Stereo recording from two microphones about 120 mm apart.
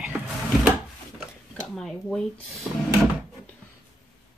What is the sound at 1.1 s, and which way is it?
Speech, 5° left (ahead or behind).